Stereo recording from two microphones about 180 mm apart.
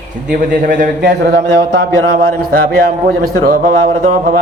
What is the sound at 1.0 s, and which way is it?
Speech, 70° right (ahead or behind).